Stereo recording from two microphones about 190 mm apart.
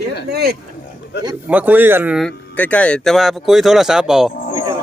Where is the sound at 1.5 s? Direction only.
10° right (ahead or behind).